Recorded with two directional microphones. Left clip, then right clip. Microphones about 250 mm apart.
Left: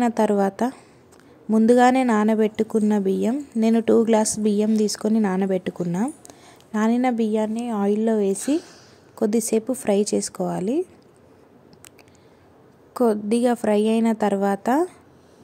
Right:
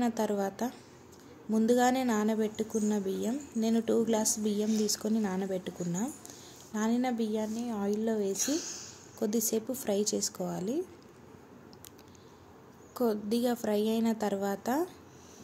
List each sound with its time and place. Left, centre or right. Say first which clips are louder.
0.0 s speech: left 11 dB; left
8.4 s speech: left 8 dB; centre
9.2 s speech: left 10 dB; left
12.9 s speech: left 10 dB; left